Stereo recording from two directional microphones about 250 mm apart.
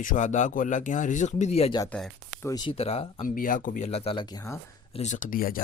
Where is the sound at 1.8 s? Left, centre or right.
Centre.